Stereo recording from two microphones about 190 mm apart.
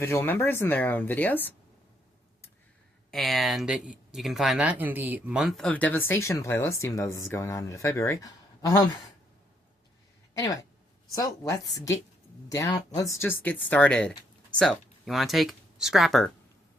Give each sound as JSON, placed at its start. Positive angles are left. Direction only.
{"t": 0.0, "sound": "speech", "side_deg": 10}
{"t": 3.1, "sound": "speech", "side_deg": 0}
{"t": 11.1, "sound": "speech", "side_deg": 20}